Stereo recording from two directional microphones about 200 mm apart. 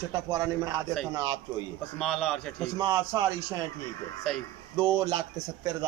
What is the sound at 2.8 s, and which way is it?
Speech, 15° right (ahead or behind).